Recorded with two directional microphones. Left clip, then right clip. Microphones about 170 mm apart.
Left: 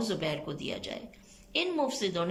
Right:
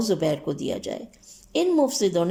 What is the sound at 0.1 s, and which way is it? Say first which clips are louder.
Speech: right 9 dB; 40° right (ahead or behind).